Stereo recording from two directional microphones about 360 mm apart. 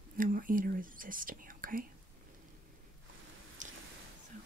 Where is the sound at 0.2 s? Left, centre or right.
Right.